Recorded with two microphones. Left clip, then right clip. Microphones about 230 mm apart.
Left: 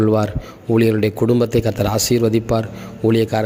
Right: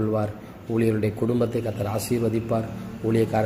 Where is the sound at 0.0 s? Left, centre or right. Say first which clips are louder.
Left 9 dB; left.